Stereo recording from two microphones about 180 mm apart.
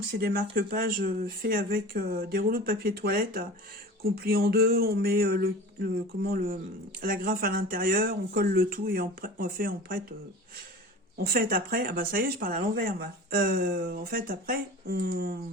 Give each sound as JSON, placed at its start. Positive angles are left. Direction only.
{"t": 0.0, "sound": "speech", "side_deg": -60}
{"t": 11.2, "sound": "speech", "side_deg": -55}